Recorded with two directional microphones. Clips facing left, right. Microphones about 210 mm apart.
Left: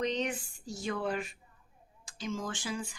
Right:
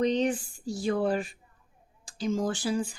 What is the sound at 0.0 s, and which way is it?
Speech, 30° right (ahead or behind).